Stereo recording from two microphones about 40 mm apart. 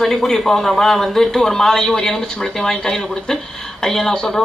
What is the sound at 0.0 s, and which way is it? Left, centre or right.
Speech, centre.